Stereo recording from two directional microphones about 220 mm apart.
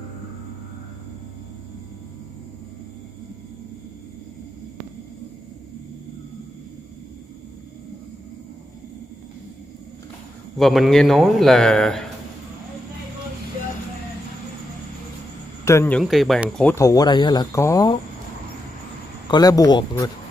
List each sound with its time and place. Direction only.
10.6 s a man's voice: centre (ahead or behind)
15.6 s speech: 10° left (ahead or behind)
16.0 s speech: centre (ahead or behind)
19.2 s speech: 20° left (ahead or behind)